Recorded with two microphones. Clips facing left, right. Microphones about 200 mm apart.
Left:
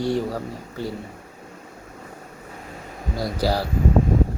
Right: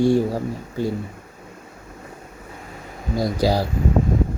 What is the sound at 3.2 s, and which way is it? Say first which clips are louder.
Speech: right 3 dB; 15° right (ahead or behind).